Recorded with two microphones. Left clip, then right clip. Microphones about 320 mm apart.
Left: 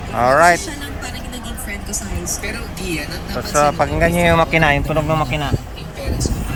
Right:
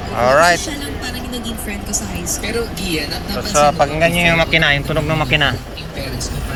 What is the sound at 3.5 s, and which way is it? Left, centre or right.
Speech, centre.